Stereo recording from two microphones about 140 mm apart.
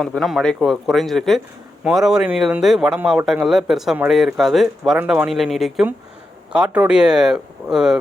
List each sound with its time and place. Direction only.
0.0 s speech: centre (ahead or behind)